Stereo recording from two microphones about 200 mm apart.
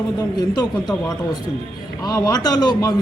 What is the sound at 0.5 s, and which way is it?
A man's voice, 20° left (ahead or behind).